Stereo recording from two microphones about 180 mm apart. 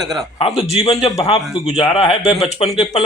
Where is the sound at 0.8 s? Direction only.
35° left (ahead or behind).